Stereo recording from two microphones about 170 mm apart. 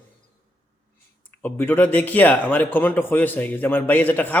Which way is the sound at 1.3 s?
10° left (ahead or behind).